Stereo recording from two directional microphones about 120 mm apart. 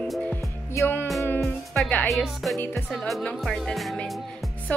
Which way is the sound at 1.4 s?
5° left (ahead or behind).